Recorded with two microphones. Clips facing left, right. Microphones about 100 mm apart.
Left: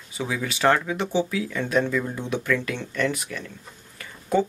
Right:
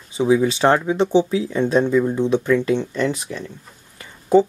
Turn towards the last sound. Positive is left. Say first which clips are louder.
# right 8 dB
turn(degrees=-30)  # may be behind; listen again after turning